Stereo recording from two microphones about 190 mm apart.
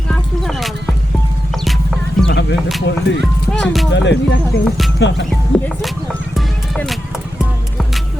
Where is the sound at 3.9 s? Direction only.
70° left (ahead or behind).